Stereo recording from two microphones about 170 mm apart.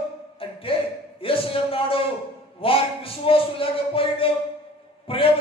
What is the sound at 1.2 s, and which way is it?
Speech, 30° left (ahead or behind).